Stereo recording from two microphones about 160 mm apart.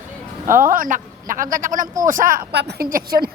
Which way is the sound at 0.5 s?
60° right (ahead or behind).